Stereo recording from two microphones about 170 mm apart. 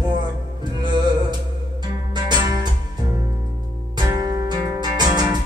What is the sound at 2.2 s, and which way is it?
Music, 25° right (ahead or behind).